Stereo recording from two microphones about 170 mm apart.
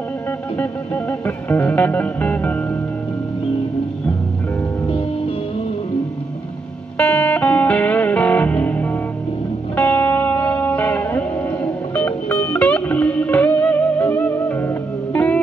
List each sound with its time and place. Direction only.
0.6 s music: 10° left (ahead or behind)
4.8 s music: 30° left (ahead or behind)
7.0 s music: 10° left (ahead or behind)